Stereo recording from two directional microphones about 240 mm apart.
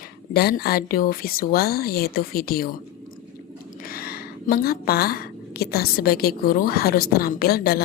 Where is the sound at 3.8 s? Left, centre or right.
Left.